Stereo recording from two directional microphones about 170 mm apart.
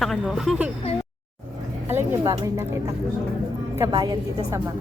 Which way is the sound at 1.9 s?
15° right (ahead or behind).